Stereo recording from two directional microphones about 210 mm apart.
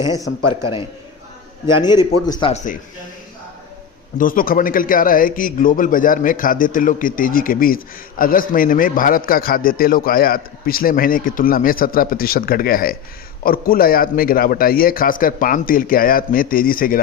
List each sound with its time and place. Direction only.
0.3 s a man's voice: 90° left
2.0 s speech: 20° left (ahead or behind)
4.2 s a man's voice: 40° left (ahead or behind)